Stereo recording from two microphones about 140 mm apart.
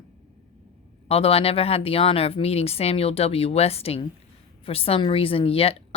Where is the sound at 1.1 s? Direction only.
45° left (ahead or behind).